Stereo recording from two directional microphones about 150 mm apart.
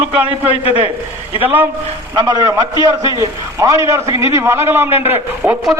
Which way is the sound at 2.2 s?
30° right (ahead or behind).